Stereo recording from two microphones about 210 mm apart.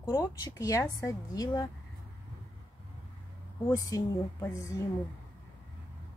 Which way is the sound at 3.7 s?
20° left (ahead or behind).